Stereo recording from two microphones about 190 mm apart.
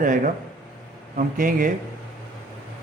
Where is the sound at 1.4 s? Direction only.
45° right (ahead or behind).